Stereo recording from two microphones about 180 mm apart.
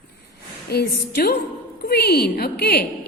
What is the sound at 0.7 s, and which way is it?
A woman's voice, 60° left (ahead or behind).